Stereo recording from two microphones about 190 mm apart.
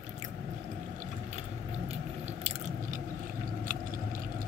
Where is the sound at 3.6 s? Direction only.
45° right (ahead or behind).